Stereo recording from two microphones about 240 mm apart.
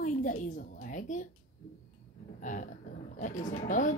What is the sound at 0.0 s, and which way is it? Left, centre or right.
A woman's voice, left.